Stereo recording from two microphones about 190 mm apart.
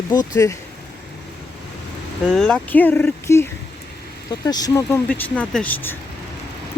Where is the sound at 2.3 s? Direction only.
5° left (ahead or behind).